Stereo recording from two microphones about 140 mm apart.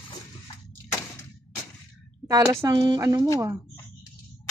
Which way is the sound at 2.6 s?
25° right (ahead or behind).